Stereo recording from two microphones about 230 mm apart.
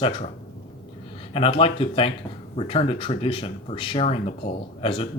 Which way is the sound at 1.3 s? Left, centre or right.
Left.